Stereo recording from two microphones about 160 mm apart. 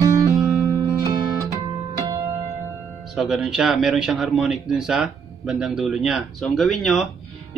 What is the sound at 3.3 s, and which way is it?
Speech, 5° right (ahead or behind).